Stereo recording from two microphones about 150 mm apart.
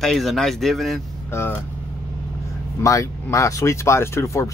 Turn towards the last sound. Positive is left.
turn(degrees=20)  # may be behind; listen again after turning